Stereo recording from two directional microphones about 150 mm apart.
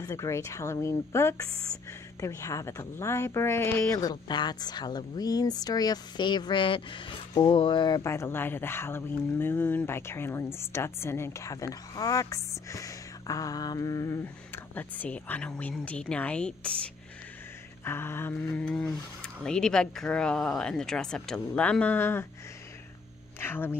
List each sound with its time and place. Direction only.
0.0 s speech: 20° left (ahead or behind)
8.0 s speech: 20° left (ahead or behind)
23.4 s speech: 15° left (ahead or behind)